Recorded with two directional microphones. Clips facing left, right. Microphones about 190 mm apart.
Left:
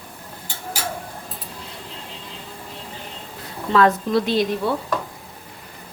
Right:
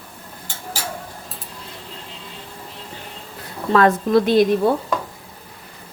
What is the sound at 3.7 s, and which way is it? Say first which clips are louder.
A woman's voice: right 2 dB; 50° right (ahead or behind).